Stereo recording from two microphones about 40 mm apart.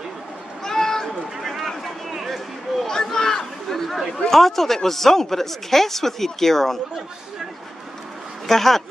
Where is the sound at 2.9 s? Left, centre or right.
Centre.